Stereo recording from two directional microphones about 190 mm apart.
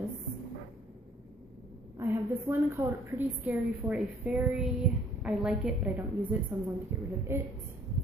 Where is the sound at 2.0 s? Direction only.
10° right (ahead or behind).